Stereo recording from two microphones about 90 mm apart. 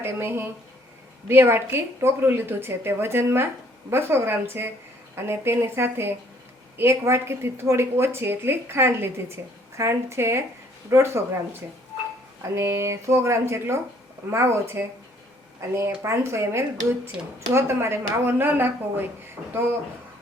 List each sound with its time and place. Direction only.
0.0 s a woman's voice: 25° right (ahead or behind)
12.4 s a woman's voice: 30° right (ahead or behind)
16.0 s a woman's voice: 30° right (ahead or behind)